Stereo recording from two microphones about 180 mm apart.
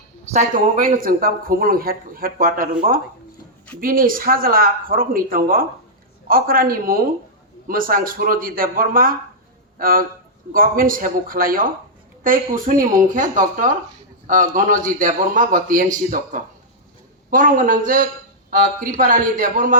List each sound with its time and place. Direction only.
0.3 s a man's voice: 45° right (ahead or behind)